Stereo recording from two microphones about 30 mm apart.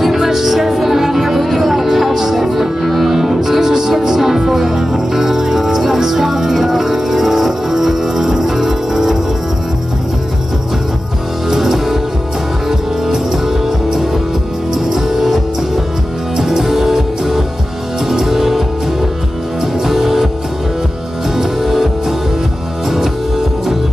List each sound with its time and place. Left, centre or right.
0.0 s music: centre
3.1 s music: centre
11.5 s music: centre
19.9 s music: centre
21.4 s music: centre